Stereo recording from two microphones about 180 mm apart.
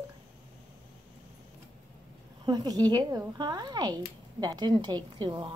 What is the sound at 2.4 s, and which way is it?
A woman's voice, 25° right (ahead or behind).